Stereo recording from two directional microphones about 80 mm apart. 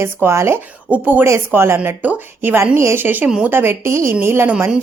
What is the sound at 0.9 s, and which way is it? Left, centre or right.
Speech, right.